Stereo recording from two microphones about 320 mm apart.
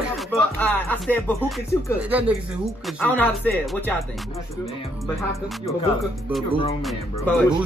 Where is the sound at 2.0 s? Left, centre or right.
Centre.